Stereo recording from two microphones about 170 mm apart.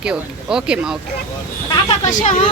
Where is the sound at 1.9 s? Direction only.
45° left (ahead or behind).